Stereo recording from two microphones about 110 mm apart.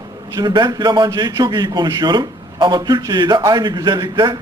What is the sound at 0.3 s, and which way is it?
A man's voice, 40° right (ahead or behind).